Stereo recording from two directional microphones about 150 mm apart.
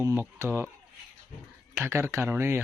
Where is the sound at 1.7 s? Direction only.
15° right (ahead or behind).